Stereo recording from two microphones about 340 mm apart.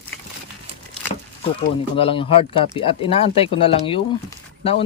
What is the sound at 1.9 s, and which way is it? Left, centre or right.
Speech, centre.